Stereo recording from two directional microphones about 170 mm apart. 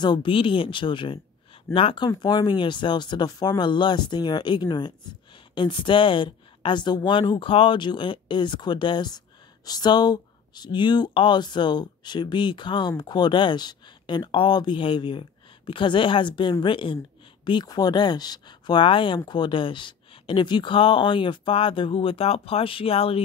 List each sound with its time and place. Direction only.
0.0 s speech: 25° left (ahead or behind)